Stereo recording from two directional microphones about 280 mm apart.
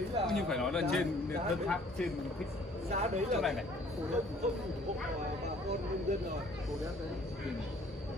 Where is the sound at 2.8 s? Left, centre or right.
Right.